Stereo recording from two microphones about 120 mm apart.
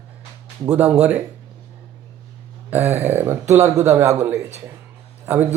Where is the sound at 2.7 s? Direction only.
15° right (ahead or behind).